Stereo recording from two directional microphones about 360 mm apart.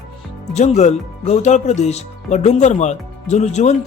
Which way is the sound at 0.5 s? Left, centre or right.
Centre.